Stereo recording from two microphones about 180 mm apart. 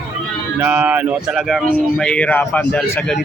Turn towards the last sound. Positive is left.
turn(degrees=10)  # may be behind; listen again after turning